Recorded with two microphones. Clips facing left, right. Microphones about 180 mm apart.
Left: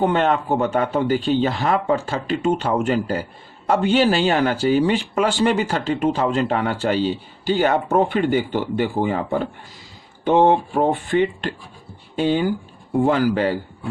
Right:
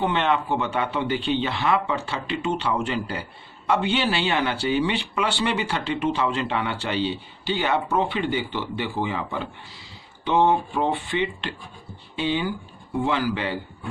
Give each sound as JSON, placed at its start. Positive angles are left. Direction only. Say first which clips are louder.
{"t": 0.0, "sound": "speech", "louder": "left 4 dB", "side_deg": 45}